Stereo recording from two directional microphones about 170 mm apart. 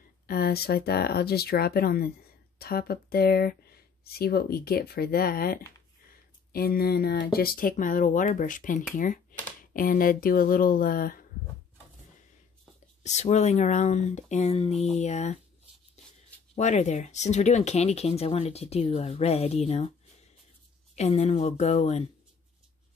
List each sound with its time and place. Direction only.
0.3 s speech: 65° left (ahead or behind)
13.0 s speech: 45° left (ahead or behind)
16.5 s speech: 45° left (ahead or behind)
20.9 s speech: 40° left (ahead or behind)